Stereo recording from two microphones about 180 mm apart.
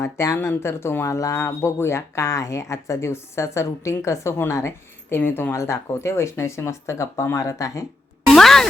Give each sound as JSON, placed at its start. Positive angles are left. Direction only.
{"t": 0.0, "sound": "speech", "side_deg": 15}
{"t": 8.3, "sound": "music", "side_deg": 0}